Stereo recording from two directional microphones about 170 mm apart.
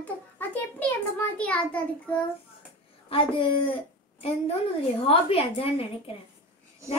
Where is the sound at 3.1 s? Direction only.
35° left (ahead or behind).